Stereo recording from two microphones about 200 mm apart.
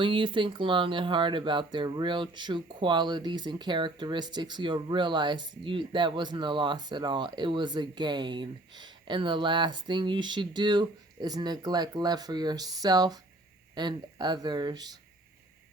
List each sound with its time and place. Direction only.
0.0 s speech: 25° right (ahead or behind)